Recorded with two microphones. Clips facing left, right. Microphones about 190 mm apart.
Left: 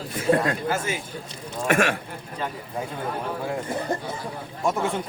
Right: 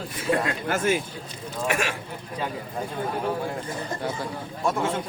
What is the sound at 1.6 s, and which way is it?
Speech, 50° left (ahead or behind).